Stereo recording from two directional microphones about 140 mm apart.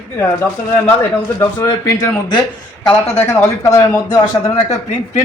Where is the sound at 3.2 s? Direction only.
20° left (ahead or behind).